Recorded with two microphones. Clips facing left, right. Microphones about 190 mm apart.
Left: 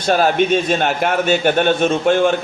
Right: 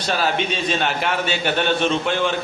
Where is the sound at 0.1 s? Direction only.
50° left (ahead or behind).